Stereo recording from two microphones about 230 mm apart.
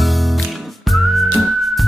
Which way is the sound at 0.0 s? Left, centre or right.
Centre.